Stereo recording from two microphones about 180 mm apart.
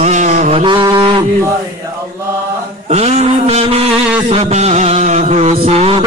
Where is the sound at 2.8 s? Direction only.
35° right (ahead or behind).